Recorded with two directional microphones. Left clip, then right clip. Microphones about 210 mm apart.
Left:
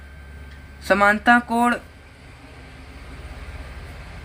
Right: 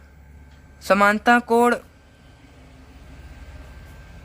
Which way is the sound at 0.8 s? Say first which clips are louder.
Even; 50° right (ahead or behind).